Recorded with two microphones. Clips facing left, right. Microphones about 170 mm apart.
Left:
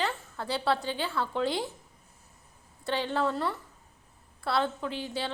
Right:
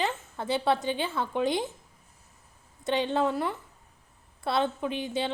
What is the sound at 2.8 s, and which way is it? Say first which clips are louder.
A woman's voice: right 3 dB; 20° right (ahead or behind).